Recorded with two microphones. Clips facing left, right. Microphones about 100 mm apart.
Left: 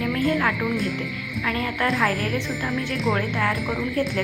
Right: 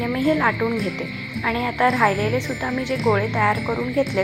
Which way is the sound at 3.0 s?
Centre (ahead or behind).